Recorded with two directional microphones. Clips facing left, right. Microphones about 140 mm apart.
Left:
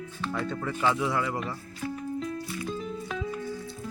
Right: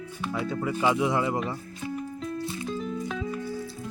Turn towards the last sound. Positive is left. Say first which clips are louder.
# right 2 dB
turn(degrees=0)  # may be behind; listen again after turning